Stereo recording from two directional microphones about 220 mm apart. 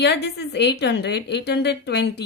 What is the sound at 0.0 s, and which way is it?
A woman's voice, 50° left (ahead or behind).